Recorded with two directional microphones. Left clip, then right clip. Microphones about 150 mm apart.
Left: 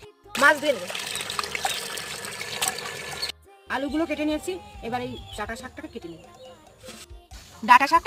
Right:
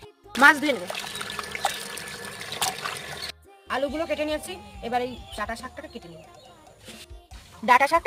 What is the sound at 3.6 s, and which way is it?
Music, 25° right (ahead or behind).